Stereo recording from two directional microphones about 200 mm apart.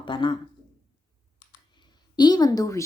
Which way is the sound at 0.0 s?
25° left (ahead or behind).